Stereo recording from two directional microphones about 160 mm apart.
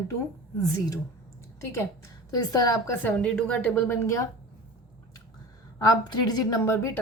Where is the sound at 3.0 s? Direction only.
10° left (ahead or behind).